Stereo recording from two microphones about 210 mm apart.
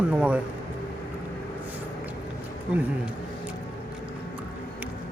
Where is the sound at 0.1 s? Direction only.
5° right (ahead or behind).